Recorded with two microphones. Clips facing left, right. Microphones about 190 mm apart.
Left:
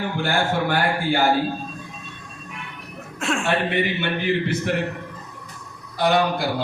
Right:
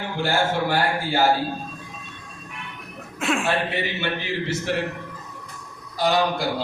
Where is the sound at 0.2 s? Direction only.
55° left (ahead or behind).